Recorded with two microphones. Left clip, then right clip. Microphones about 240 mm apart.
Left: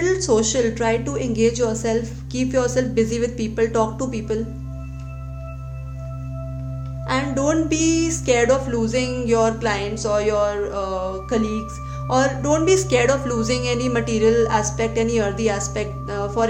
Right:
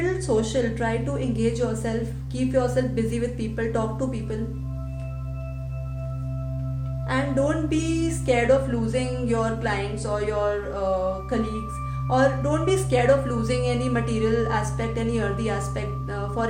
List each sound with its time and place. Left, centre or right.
0.0 s a woman's voice: left
7.1 s a woman's voice: left